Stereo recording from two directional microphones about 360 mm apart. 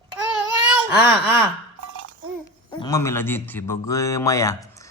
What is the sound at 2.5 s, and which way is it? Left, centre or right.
A man's voice, centre.